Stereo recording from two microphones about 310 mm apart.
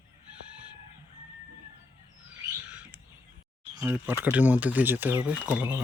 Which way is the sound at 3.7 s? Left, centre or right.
Centre.